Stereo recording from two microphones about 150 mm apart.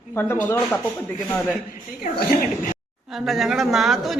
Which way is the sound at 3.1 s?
Centre (ahead or behind).